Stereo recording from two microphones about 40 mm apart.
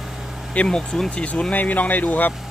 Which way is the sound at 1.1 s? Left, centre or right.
Left.